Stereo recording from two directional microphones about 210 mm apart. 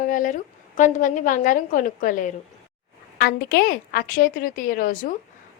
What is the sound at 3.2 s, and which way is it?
A woman's voice, 50° left (ahead or behind).